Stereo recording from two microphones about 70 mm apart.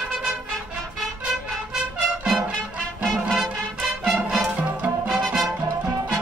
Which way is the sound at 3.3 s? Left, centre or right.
Centre.